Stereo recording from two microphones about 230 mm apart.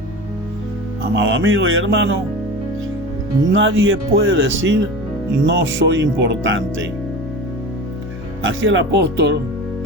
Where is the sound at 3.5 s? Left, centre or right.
Right.